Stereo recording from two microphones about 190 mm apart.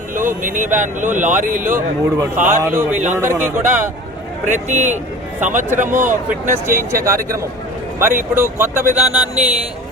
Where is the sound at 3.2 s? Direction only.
15° right (ahead or behind).